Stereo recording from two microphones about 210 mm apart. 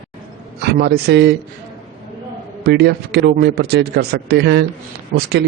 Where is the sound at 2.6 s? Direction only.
50° right (ahead or behind).